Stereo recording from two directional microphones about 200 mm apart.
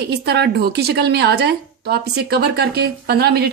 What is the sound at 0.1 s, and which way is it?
A woman's voice, 55° right (ahead or behind).